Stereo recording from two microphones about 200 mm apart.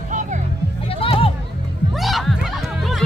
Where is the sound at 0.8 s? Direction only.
30° left (ahead or behind).